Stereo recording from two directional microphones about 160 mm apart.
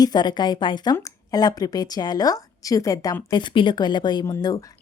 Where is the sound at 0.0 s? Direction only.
25° left (ahead or behind).